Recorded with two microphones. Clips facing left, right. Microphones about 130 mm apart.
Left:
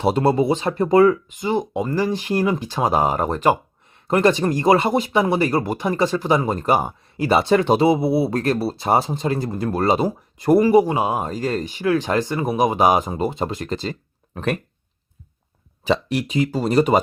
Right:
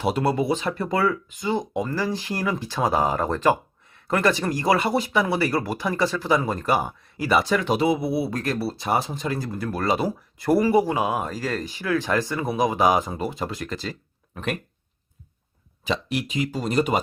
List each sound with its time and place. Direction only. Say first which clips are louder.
0.0 s speech: left 5 dB; 30° left (ahead or behind)
15.9 s speech: left 6 dB; 35° left (ahead or behind)